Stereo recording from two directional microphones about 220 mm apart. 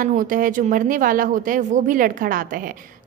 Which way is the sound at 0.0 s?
35° right (ahead or behind).